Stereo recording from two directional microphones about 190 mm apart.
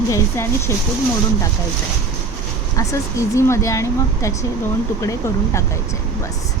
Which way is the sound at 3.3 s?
15° left (ahead or behind).